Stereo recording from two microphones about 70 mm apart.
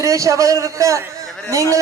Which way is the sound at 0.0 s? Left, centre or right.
Right.